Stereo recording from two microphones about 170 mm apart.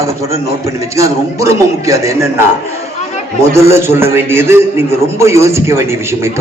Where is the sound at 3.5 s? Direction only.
15° right (ahead or behind).